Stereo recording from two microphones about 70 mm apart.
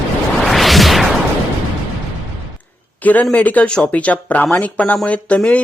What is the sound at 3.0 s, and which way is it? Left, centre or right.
A man's voice, left.